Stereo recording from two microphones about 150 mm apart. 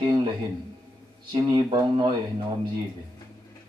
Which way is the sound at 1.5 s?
30° right (ahead or behind).